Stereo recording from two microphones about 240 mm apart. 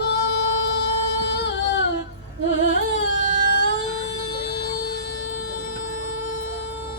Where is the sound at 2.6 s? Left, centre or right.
Left.